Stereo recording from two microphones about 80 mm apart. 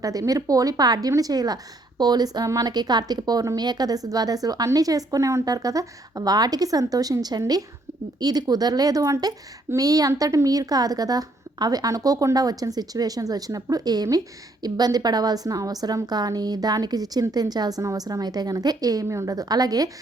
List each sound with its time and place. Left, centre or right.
0.0 s a woman's voice: right
19.0 s a woman's voice: right